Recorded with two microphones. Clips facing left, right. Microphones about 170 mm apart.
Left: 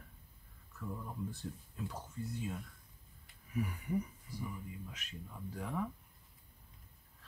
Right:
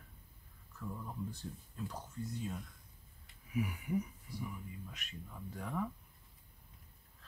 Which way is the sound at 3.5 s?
5° right (ahead or behind).